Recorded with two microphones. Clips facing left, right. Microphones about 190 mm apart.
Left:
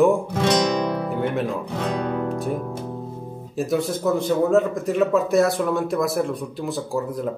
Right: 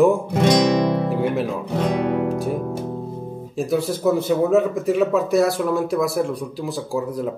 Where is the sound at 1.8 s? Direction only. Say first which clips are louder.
Right 4 dB; 15° right (ahead or behind).